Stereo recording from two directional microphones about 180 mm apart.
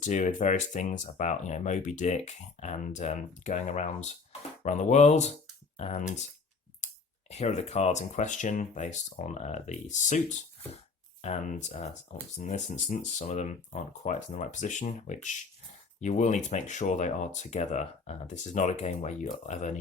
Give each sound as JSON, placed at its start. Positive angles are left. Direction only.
{"t": 0.0, "sound": "speech", "side_deg": 45}
{"t": 11.2, "sound": "speech", "side_deg": 40}